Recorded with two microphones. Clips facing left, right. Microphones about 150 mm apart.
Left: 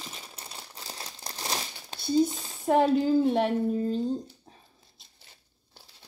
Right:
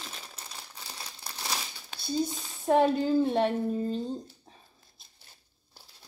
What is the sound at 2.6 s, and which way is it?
Speech, 10° left (ahead or behind).